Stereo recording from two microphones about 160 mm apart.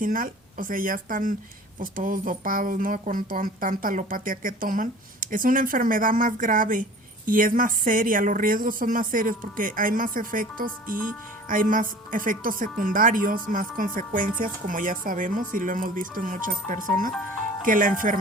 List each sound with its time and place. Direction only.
0.0 s speech: 60° right (ahead or behind)